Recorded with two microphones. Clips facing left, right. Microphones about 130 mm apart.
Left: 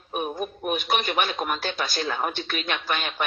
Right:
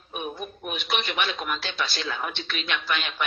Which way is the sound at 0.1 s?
45° left (ahead or behind).